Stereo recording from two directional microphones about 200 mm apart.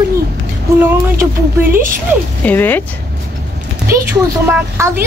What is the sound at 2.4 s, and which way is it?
Speech, 10° left (ahead or behind).